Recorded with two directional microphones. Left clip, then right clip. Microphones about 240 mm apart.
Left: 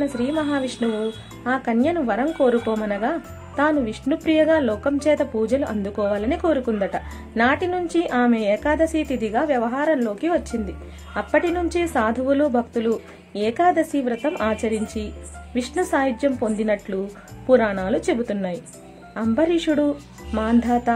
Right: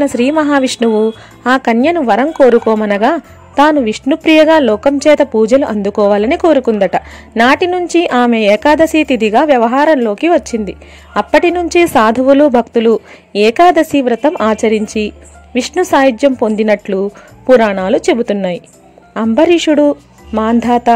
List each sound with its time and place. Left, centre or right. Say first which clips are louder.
0.0 s speech: right 12 dB; right